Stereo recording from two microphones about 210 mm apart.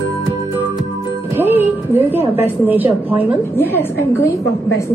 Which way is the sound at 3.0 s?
10° right (ahead or behind).